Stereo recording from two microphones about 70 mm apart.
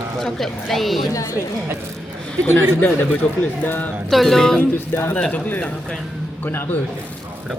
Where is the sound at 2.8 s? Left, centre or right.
Left.